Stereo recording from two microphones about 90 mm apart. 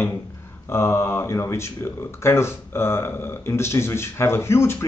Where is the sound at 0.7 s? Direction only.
30° left (ahead or behind).